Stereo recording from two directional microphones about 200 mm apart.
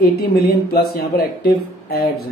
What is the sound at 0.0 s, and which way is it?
Speech, 50° left (ahead or behind).